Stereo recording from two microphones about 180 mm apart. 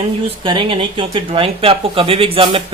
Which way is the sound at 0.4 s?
30° right (ahead or behind).